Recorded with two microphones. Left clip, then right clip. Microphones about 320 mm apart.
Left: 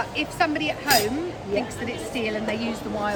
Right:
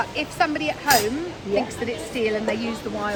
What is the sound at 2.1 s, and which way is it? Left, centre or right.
Speech, centre.